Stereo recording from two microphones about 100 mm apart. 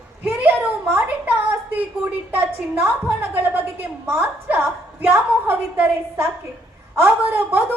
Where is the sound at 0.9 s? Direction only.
15° right (ahead or behind).